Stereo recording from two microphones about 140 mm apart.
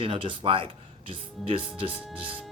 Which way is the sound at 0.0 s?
35° right (ahead or behind).